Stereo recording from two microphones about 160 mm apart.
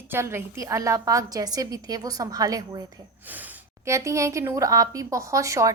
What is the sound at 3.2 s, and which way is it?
A woman's voice, 10° right (ahead or behind).